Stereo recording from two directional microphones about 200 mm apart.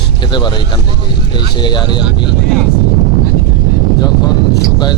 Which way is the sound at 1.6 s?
20° left (ahead or behind).